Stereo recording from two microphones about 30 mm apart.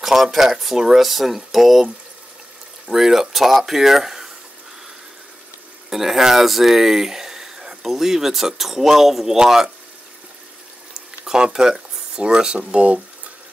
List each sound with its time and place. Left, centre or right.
0.0 s speech: centre
2.9 s speech: centre
5.9 s speech: centre
11.3 s speech: right